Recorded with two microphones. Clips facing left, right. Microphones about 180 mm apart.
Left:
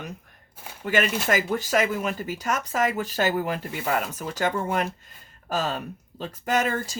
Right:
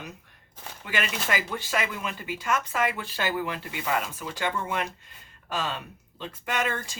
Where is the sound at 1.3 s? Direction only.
45° left (ahead or behind).